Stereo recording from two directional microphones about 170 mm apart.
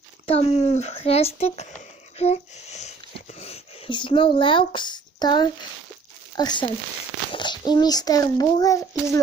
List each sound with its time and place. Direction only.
0.3 s a child's voice: 35° left (ahead or behind); by 8.8 s 20° left (ahead or behind)